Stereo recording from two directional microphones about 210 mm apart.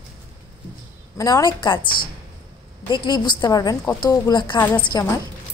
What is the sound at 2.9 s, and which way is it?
A woman's voice, 20° left (ahead or behind).